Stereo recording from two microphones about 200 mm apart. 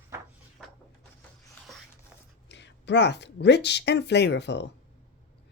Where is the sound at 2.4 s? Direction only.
60° left (ahead or behind).